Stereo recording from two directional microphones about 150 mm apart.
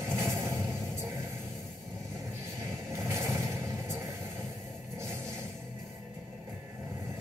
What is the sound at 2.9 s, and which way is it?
Vehicle, 20° right (ahead or behind).